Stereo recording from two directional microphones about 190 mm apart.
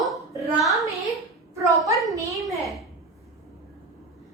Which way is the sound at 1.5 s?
15° right (ahead or behind).